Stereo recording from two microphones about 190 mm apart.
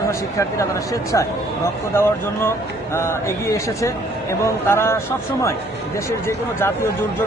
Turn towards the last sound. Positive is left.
turn(degrees=15)  # may be behind; listen again after turning